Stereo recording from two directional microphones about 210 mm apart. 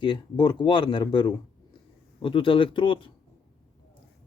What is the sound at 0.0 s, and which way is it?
Speech, 20° left (ahead or behind).